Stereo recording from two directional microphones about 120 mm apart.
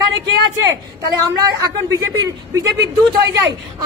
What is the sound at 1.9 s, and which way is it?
Speech, 30° right (ahead or behind).